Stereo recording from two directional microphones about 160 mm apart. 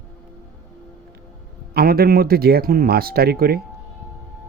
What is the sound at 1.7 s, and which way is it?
Speech, 70° right (ahead or behind).